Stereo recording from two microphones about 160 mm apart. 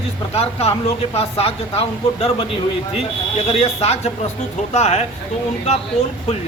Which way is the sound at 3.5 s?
40° left (ahead or behind).